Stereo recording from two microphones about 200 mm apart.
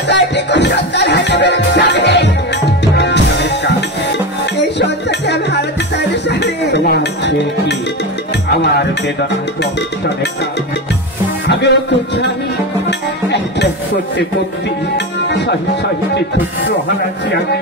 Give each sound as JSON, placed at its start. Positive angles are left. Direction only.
{"t": 0.1, "sound": "music", "side_deg": 60}
{"t": 11.4, "sound": "music", "side_deg": 60}
{"t": 15.2, "sound": "music", "side_deg": 60}